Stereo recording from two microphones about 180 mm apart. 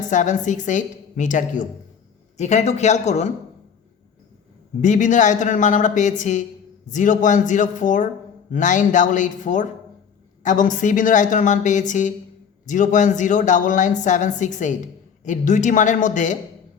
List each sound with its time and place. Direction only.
0.1 s speech: 45° left (ahead or behind)
4.8 s speech: 45° left (ahead or behind)